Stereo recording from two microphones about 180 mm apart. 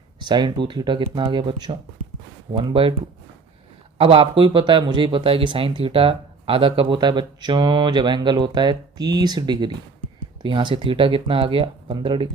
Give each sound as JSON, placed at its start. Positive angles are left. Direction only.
{"t": 0.2, "sound": "speech", "side_deg": -25}
{"t": 3.9, "sound": "speech", "side_deg": -30}